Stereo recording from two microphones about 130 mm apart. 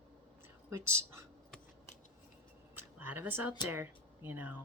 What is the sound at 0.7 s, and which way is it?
Speech, 20° right (ahead or behind).